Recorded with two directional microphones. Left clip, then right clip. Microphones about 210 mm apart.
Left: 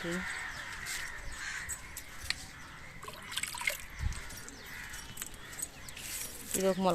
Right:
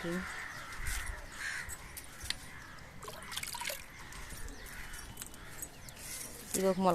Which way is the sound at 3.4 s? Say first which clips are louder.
Left 5 dB; 40° right (ahead or behind).